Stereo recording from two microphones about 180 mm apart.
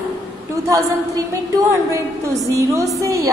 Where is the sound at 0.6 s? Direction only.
20° right (ahead or behind).